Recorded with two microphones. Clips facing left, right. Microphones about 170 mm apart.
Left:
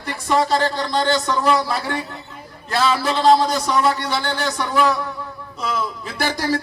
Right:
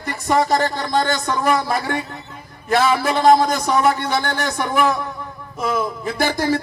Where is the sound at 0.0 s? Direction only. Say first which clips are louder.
Right 1 dB; 45° right (ahead or behind).